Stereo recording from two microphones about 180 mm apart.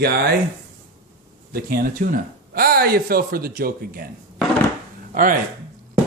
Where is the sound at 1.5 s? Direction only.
55° right (ahead or behind).